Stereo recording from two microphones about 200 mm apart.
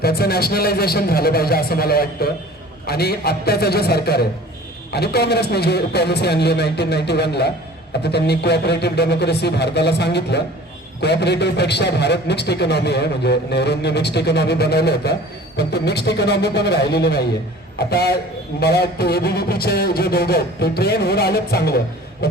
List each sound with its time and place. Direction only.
0.0 s a man's voice: 50° left (ahead or behind)
22.2 s beatboxing: 50° left (ahead or behind)